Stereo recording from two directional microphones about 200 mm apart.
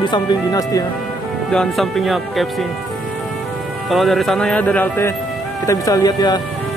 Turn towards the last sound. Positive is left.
turn(degrees=20)  # may be behind; listen again after turning